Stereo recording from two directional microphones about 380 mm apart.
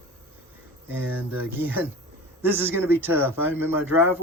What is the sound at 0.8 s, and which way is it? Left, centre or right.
Speech, centre.